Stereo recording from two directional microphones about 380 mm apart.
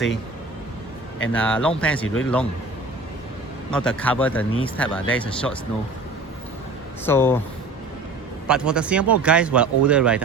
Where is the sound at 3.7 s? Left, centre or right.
Centre.